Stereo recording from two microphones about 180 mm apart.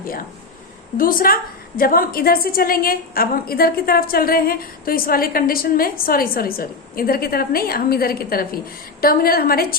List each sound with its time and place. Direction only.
0.9 s a woman's voice: 50° left (ahead or behind)